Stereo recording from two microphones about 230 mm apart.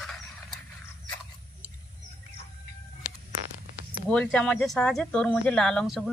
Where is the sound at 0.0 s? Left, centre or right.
Centre.